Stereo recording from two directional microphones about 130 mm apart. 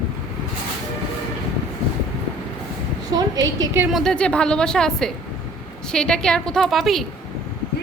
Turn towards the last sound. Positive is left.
turn(degrees=0)  # may be behind; listen again after turning